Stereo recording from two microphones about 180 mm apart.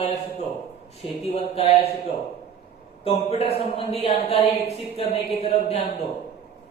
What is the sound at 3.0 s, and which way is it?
Speech, 35° left (ahead or behind).